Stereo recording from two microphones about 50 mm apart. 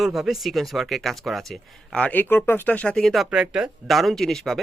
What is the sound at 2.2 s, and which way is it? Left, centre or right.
Speech, left.